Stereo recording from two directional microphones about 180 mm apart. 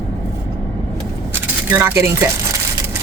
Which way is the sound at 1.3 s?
15° right (ahead or behind).